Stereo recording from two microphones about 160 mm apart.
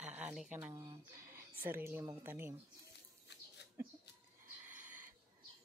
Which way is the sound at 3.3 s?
90° left.